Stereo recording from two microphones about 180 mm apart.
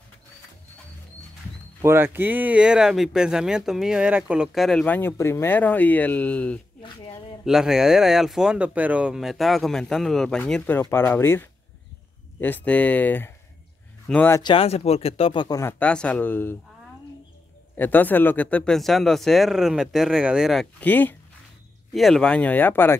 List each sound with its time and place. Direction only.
1.8 s speech: 15° right (ahead or behind); by 6.6 s 5° left (ahead or behind)
7.4 s speech: 5° right (ahead or behind)
14.4 s speech: 30° left (ahead or behind)
15.8 s speech: 5° left (ahead or behind)
17.7 s speech: 10° left (ahead or behind)
20.8 s speech: 10° left (ahead or behind)